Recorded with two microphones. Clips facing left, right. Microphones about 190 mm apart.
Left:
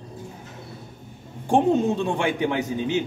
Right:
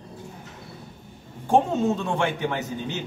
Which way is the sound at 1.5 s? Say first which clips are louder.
Left 2 dB; 15° left (ahead or behind).